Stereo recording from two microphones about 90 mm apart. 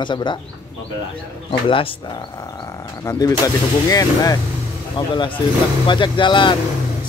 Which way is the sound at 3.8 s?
40° left (ahead or behind).